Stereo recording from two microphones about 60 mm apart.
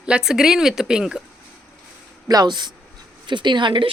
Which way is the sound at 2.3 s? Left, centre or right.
Right.